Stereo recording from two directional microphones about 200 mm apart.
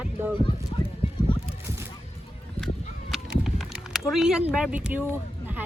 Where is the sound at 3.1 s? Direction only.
Centre (ahead or behind).